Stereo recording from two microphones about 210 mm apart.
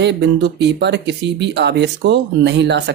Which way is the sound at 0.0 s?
55° right (ahead or behind).